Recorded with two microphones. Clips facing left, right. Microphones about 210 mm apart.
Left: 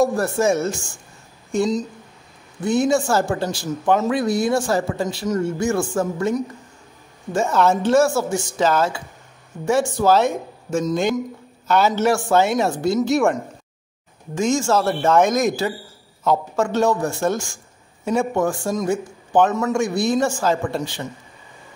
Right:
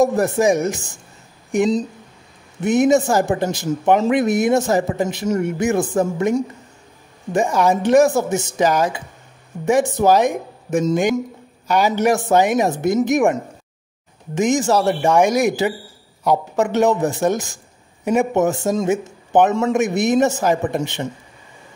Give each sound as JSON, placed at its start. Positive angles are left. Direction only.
{"t": 0.0, "sound": "speech", "side_deg": -20}